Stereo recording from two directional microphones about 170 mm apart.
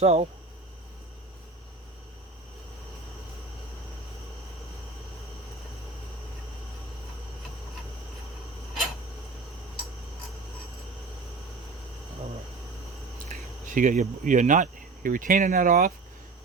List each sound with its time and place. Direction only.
0.0 s speech: 40° right (ahead or behind)
13.7 s speech: 50° right (ahead or behind)